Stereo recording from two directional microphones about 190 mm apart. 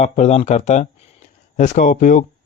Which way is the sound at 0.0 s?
35° left (ahead or behind).